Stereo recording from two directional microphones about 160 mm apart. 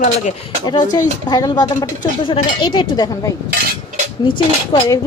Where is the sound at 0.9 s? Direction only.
25° left (ahead or behind).